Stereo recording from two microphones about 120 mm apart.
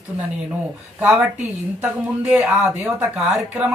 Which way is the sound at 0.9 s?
10° right (ahead or behind).